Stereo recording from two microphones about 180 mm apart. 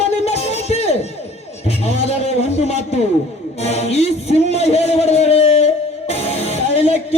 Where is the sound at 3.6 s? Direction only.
35° left (ahead or behind).